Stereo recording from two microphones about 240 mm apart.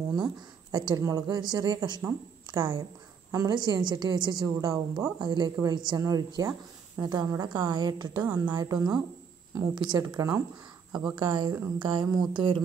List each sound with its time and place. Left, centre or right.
0.1 s speech: centre